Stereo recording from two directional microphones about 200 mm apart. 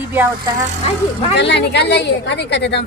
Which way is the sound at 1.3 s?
60° left (ahead or behind).